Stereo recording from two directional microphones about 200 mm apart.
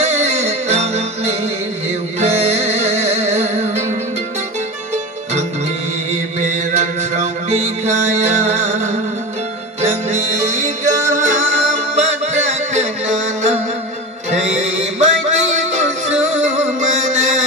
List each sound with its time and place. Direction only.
0.0 s music: 35° right (ahead or behind)
6.4 s music: 35° right (ahead or behind)